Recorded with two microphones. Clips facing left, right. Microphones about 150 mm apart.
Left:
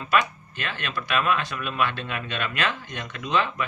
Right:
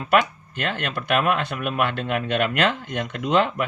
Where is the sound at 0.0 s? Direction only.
55° right (ahead or behind).